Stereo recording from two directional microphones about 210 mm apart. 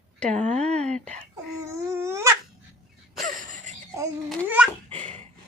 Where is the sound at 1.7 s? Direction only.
15° right (ahead or behind).